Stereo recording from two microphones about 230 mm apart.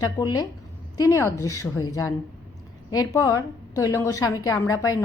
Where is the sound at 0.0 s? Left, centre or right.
Centre.